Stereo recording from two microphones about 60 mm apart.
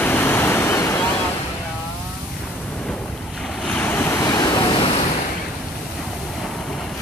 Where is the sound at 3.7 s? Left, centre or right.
Left.